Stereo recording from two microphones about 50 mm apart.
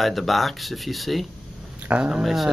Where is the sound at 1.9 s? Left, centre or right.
Right.